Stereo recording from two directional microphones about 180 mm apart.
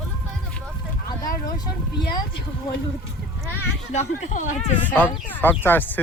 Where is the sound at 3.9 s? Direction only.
40° left (ahead or behind).